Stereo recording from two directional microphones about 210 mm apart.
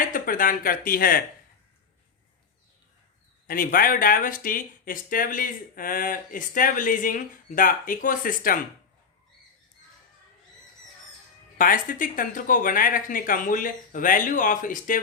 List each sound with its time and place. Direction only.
0.1 s speech: 40° left (ahead or behind)
3.4 s speech: 40° left (ahead or behind)
11.5 s speech: 40° left (ahead or behind)